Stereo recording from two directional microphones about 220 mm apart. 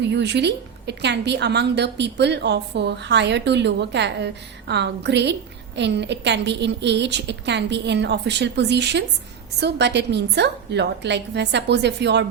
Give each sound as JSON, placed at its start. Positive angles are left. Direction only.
{"t": 0.0, "sound": "a woman's voice", "side_deg": -50}